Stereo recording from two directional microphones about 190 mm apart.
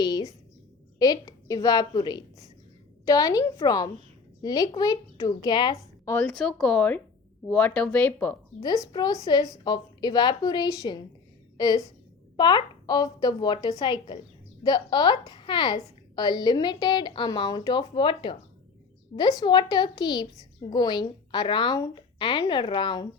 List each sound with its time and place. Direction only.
0.0 s a sound: 20° left (ahead or behind)
0.9 s a woman's voice: 20° left (ahead or behind)
6.2 s speech: centre (ahead or behind)
8.6 s a woman's voice: 20° left (ahead or behind)